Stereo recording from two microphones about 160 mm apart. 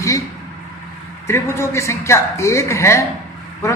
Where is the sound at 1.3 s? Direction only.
15° left (ahead or behind).